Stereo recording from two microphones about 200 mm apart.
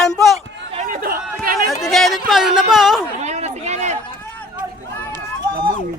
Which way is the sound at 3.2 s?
35° right (ahead or behind).